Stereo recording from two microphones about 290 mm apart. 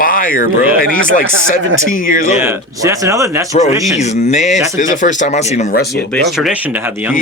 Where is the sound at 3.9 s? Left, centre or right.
Left.